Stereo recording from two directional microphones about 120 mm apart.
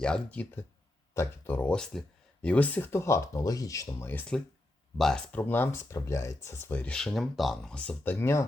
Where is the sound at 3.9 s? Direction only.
15° left (ahead or behind).